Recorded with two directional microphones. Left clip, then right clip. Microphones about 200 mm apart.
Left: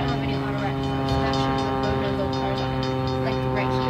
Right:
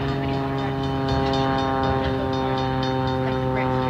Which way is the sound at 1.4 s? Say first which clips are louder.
Right 2 dB; 5° right (ahead or behind).